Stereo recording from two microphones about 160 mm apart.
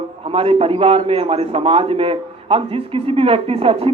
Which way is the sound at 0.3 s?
35° right (ahead or behind).